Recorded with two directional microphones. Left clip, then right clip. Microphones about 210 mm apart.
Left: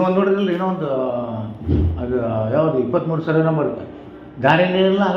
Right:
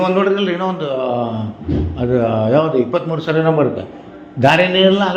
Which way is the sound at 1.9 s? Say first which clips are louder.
Right 7 dB; 50° right (ahead or behind).